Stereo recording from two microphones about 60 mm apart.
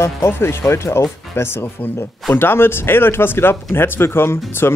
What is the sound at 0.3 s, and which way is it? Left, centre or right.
Speech, left.